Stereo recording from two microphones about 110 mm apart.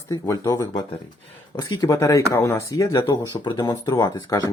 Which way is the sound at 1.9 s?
30° left (ahead or behind).